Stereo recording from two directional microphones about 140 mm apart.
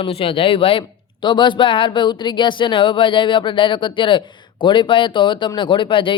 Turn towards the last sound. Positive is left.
turn(degrees=35)  # may be behind; listen again after turning